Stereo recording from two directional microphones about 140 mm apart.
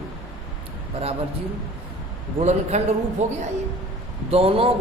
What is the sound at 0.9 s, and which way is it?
Speech, 45° right (ahead or behind).